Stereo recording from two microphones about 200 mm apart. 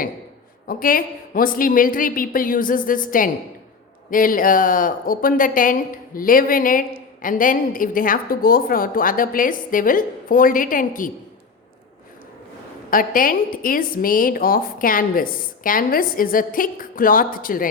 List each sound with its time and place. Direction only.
0.7 s a woman's voice: 45° left (ahead or behind)
12.9 s a woman's voice: 45° left (ahead or behind)